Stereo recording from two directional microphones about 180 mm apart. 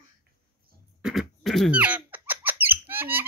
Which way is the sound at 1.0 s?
Centre (ahead or behind).